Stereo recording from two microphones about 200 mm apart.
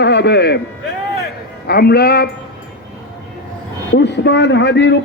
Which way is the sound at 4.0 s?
60° left (ahead or behind).